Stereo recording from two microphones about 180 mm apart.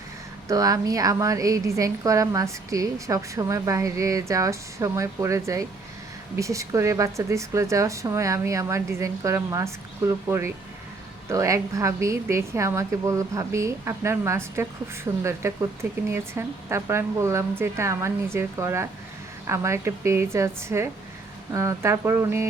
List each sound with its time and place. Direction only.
0.4 s a woman's voice: 20° right (ahead or behind)